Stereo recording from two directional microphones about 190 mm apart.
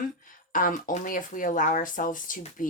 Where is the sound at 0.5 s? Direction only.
45° left (ahead or behind).